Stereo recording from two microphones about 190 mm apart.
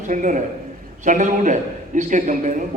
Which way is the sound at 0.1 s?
40° right (ahead or behind).